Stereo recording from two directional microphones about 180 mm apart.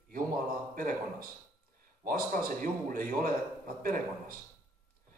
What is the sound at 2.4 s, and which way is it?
A man's voice, 50° right (ahead or behind).